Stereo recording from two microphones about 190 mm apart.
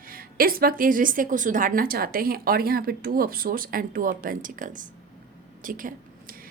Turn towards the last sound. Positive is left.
turn(degrees=-45)  # may be behind; listen again after turning